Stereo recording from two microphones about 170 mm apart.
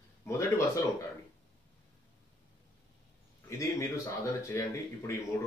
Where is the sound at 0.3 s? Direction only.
15° left (ahead or behind).